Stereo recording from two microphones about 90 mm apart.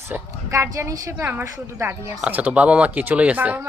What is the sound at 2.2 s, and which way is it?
Speech, 15° right (ahead or behind).